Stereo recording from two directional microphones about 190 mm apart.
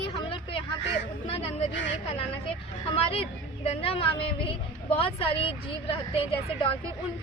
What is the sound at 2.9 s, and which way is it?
A woman's voice, 30° left (ahead or behind).